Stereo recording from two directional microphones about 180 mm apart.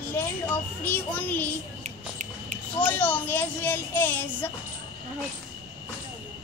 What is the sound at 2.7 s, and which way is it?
A child's voice, 10° left (ahead or behind).